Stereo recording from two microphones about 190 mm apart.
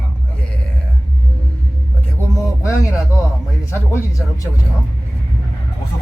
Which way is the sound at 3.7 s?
10° left (ahead or behind).